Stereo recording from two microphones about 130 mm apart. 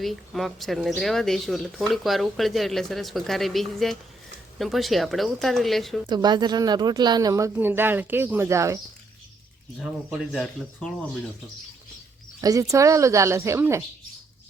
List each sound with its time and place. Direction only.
0.0 s speech: centre (ahead or behind)
6.1 s speech: 35° right (ahead or behind)
7.5 s speech: 15° right (ahead or behind)
9.8 s speech: 5° right (ahead or behind)
12.4 s speech: 25° right (ahead or behind)